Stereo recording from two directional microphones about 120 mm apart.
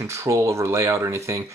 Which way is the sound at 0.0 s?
25° right (ahead or behind).